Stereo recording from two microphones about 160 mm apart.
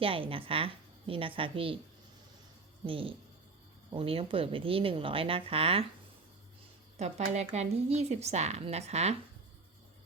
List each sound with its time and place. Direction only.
0.0 s speech: 35° right (ahead or behind)
2.8 s speech: 35° right (ahead or behind)
7.0 s speech: 45° right (ahead or behind)